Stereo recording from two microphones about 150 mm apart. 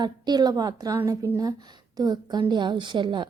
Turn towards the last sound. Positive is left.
turn(degrees=-30)  # may be behind; listen again after turning